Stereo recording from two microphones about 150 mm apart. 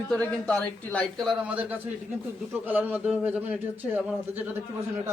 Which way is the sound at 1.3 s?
10° right (ahead or behind).